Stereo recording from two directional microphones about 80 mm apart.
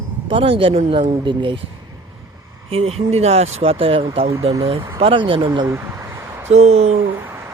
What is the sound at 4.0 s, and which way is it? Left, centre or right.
Speech, right.